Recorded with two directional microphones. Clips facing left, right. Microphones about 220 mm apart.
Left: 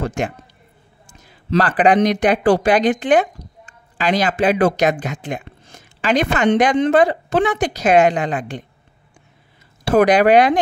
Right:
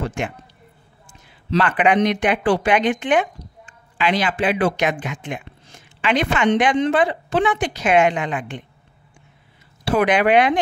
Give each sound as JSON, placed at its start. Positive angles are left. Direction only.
{"t": 0.0, "sound": "a man's voice", "side_deg": 40}
{"t": 1.0, "sound": "a sound", "side_deg": 40}
{"t": 2.0, "sound": "speech", "side_deg": 40}
{"t": 9.8, "sound": "speech", "side_deg": 40}